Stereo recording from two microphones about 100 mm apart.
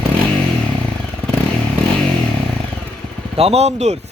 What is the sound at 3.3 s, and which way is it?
Speech, 90° right.